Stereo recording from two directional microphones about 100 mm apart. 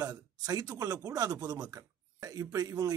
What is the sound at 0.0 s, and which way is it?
Speech, 40° right (ahead or behind).